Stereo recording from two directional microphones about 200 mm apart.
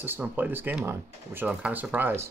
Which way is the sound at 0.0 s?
10° right (ahead or behind).